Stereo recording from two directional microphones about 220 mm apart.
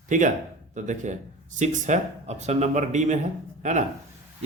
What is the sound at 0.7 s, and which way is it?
A man's voice, 35° right (ahead or behind).